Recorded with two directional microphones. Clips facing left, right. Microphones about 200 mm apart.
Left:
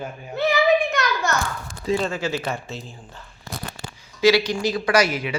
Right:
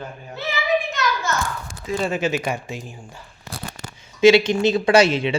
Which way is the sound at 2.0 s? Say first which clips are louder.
Right 3 dB; 20° right (ahead or behind).